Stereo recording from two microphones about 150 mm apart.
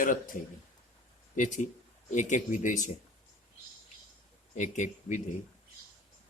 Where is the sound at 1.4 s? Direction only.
55° left (ahead or behind).